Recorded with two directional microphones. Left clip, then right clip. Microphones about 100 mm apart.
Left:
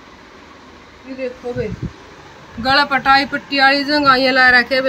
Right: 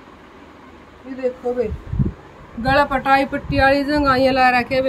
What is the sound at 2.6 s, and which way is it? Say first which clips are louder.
Speech: left 2 dB; 25° right (ahead or behind).